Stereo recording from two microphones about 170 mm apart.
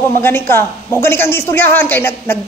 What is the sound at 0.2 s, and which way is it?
A man's voice, 15° left (ahead or behind).